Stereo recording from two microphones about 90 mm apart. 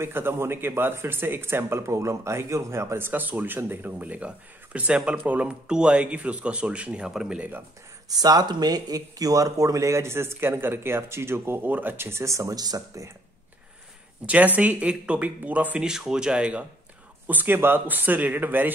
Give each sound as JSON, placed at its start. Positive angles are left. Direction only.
{"t": 0.0, "sound": "speech", "side_deg": -25}
{"t": 8.1, "sound": "speech", "side_deg": -45}
{"t": 14.2, "sound": "speech", "side_deg": -15}